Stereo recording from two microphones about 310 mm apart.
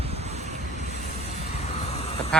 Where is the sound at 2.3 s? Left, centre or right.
Centre.